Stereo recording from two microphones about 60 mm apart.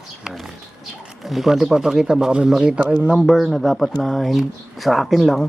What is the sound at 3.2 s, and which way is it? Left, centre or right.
Speech, centre.